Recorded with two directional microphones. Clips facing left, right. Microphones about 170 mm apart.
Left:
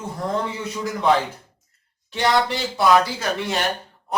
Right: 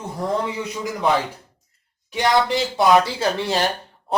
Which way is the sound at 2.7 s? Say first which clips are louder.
Right 1 dB; 30° right (ahead or behind).